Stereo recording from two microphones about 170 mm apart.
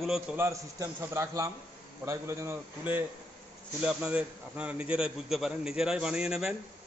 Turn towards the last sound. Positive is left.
turn(degrees=-5)  # may be behind; listen again after turning